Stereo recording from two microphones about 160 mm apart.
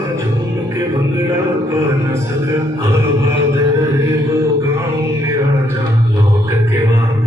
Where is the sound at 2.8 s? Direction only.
20° right (ahead or behind).